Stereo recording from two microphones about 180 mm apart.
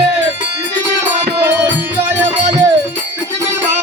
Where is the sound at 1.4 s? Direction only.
10° right (ahead or behind).